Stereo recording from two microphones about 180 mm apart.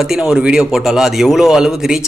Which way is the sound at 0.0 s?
5° right (ahead or behind).